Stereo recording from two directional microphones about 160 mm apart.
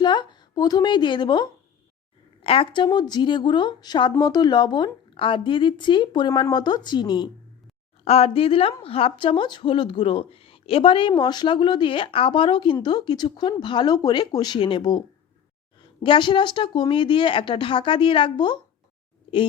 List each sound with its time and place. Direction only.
0.0 s a woman's voice: 30° left (ahead or behind)
8.0 s a woman's voice: 40° left (ahead or behind)
16.0 s a woman's voice: 30° left (ahead or behind)